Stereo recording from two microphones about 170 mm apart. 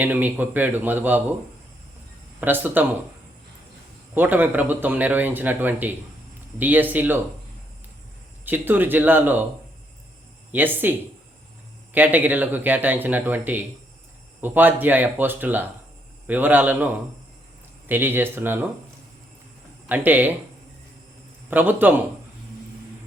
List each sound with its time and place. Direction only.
0.0 s a man's voice: 10° right (ahead or behind)
2.4 s a man's voice: 10° right (ahead or behind)
4.1 s a man's voice: 10° right (ahead or behind)
8.4 s a man's voice: 10° right (ahead or behind)
10.5 s a man's voice: 10° right (ahead or behind)
11.9 s a man's voice: 10° right (ahead or behind)
19.9 s a man's voice: 10° right (ahead or behind)
21.5 s a man's voice: 10° right (ahead or behind)